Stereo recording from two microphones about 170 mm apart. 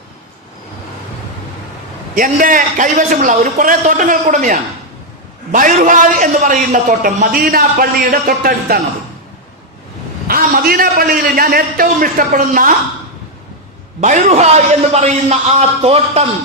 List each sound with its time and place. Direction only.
2.1 s a man's voice: 55° right (ahead or behind)
10.2 s a man's voice: 60° right (ahead or behind)
14.0 s a man's voice: 45° right (ahead or behind)